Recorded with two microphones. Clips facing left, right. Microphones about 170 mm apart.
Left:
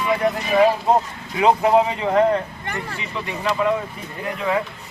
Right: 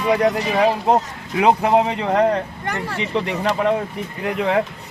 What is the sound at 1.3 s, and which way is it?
A man's voice, 65° right (ahead or behind).